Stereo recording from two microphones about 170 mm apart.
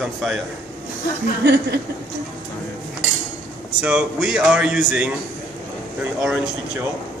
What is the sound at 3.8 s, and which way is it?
A man's voice, 5° right (ahead or behind).